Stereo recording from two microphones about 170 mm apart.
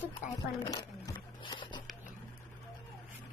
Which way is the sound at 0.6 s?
25° left (ahead or behind).